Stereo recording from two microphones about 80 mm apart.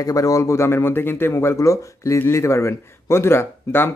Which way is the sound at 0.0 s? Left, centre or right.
Left.